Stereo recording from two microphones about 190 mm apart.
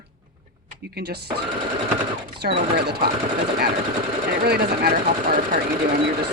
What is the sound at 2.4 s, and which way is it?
Speech, 55° right (ahead or behind).